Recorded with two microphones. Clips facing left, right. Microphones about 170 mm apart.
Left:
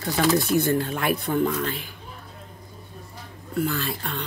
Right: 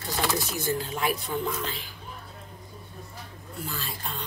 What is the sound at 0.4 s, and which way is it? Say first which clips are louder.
Speech: left 8 dB; 60° left (ahead or behind).